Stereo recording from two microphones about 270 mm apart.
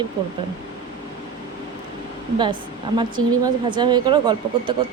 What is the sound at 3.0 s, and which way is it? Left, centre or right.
A woman's voice, centre.